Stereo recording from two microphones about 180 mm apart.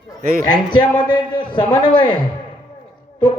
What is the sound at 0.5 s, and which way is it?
A man's voice, 25° left (ahead or behind).